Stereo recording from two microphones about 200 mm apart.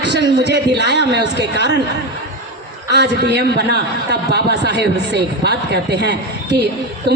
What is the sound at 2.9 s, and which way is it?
A man's voice, 55° right (ahead or behind).